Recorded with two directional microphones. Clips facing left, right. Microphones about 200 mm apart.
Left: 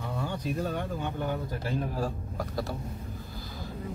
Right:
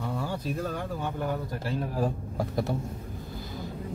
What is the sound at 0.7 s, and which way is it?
Speech, centre (ahead or behind).